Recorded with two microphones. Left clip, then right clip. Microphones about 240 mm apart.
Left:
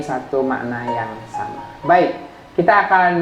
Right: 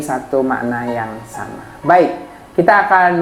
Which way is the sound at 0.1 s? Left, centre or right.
Right.